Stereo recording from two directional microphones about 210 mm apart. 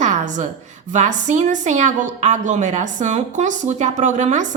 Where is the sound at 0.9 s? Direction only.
35° right (ahead or behind).